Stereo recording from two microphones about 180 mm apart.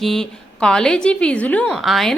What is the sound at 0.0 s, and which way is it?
A woman's voice, centre (ahead or behind).